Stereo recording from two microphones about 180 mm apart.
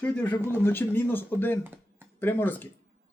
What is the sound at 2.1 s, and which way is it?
Speech, 10° left (ahead or behind).